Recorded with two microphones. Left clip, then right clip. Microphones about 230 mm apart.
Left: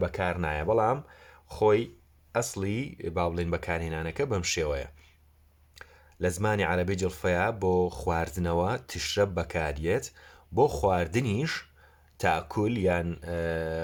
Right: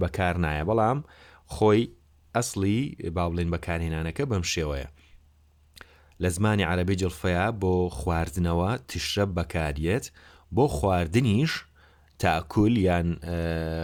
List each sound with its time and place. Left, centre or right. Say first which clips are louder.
0.0 s speech: right 2 dB; right